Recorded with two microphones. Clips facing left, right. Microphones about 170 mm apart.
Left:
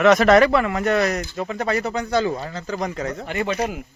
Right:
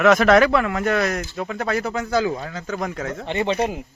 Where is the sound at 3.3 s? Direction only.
25° right (ahead or behind).